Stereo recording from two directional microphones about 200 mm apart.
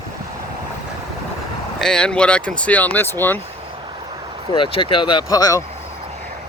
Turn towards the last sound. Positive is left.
turn(degrees=20)  # may be behind; listen again after turning